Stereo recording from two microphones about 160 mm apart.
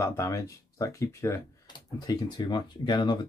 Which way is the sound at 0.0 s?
15° left (ahead or behind).